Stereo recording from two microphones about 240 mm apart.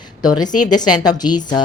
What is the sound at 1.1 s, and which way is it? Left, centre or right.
Speech, centre.